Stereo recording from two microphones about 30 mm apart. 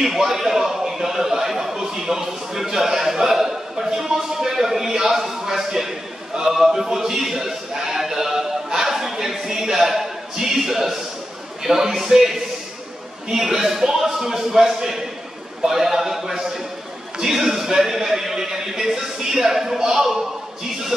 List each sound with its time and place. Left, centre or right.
0.0 s a sound: centre
6.5 s speech: centre
13.3 s speech: centre